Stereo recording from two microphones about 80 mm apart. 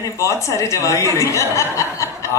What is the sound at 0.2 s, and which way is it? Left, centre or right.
Speech, left.